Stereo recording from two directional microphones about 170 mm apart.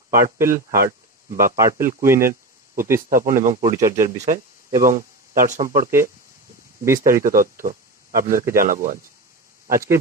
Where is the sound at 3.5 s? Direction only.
20° right (ahead or behind).